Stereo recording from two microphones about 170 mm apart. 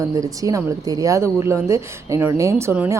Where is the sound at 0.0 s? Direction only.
20° right (ahead or behind).